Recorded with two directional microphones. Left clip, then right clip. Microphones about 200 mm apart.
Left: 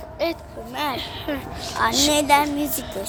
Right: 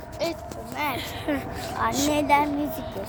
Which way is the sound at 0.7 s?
40° left (ahead or behind).